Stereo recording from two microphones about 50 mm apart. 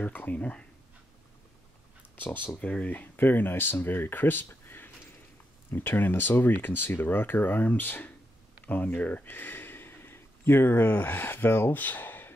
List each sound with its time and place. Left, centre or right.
0.0 s speech: left
2.1 s speech: left
2.6 s speech: left
3.2 s speech: left
4.5 s a sound: left
5.7 s speech: left